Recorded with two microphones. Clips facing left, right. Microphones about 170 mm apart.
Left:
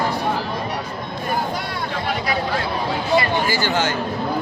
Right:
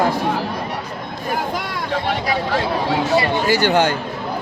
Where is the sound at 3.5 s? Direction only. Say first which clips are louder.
Right 5 dB; 65° right (ahead or behind).